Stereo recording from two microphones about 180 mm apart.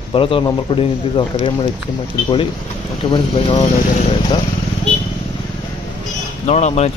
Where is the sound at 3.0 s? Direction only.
30° left (ahead or behind).